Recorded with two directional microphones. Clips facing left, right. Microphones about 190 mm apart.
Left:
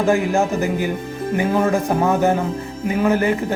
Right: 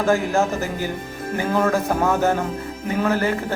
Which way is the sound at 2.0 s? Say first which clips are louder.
Left 2 dB; 15° left (ahead or behind).